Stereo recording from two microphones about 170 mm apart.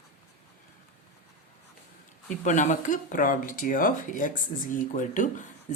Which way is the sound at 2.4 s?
45° left (ahead or behind).